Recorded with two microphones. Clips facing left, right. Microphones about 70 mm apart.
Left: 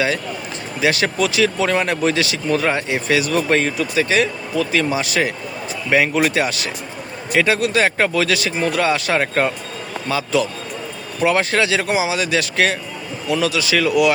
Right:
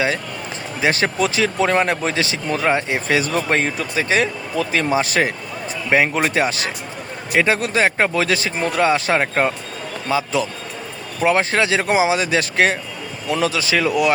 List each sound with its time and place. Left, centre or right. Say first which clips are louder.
0.8 s speech: even; right
2.6 s speech: right 1 dB; centre
3.1 s speech: left 2 dB; right